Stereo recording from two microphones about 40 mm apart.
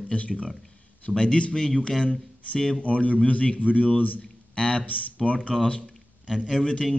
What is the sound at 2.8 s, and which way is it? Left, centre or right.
Speech, left.